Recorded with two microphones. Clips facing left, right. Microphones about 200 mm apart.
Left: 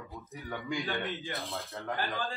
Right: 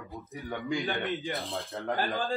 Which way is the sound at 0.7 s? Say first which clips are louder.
Right 3 dB; 15° right (ahead or behind).